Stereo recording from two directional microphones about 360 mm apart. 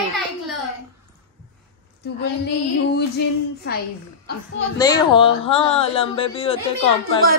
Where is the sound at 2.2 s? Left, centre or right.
Left.